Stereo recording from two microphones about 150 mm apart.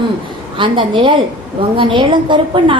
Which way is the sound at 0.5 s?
35° right (ahead or behind).